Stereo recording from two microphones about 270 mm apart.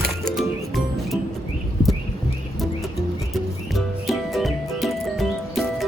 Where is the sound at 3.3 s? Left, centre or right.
Centre.